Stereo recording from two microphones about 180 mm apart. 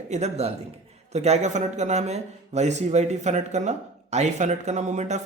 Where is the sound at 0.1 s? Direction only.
35° right (ahead or behind).